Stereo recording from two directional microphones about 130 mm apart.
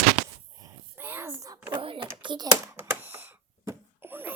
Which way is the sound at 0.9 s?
15° right (ahead or behind).